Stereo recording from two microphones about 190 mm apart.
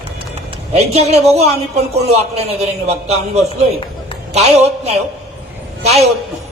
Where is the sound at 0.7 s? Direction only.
35° right (ahead or behind).